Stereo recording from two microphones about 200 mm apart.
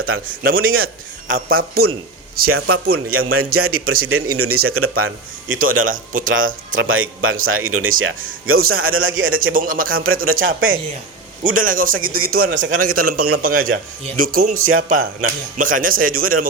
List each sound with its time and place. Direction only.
0.1 s a man's voice: 90° right
1.5 s speech: 50° right (ahead or behind)
2.6 s speech: 90° right
5.5 s speech: 45° right (ahead or behind)
6.7 s a man's voice: 85° right
9.3 s speech: 45° right (ahead or behind)
10.4 s a man's voice: 80° right
11.4 s speech: 45° right (ahead or behind)